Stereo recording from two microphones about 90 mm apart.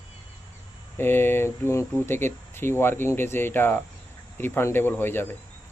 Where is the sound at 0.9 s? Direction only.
25° left (ahead or behind).